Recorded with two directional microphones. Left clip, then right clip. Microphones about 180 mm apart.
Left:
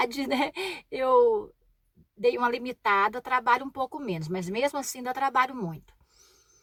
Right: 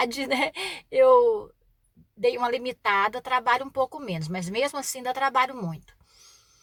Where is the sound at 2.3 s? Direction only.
15° right (ahead or behind).